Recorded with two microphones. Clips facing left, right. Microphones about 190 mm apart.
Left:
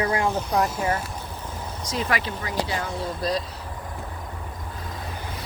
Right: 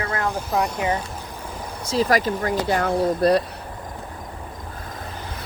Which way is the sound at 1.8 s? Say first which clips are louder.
Right 7 dB; 35° right (ahead or behind).